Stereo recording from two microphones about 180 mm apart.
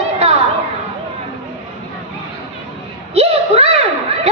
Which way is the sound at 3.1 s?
35° right (ahead or behind).